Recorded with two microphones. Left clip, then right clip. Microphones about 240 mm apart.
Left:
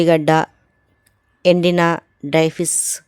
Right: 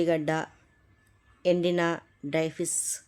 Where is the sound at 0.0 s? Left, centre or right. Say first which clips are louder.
Left 13 dB; left.